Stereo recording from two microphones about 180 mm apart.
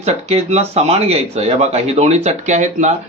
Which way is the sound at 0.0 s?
35° right (ahead or behind).